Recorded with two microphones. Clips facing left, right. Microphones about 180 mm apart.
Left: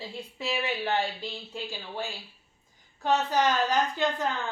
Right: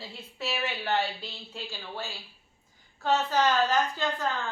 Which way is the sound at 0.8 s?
15° left (ahead or behind).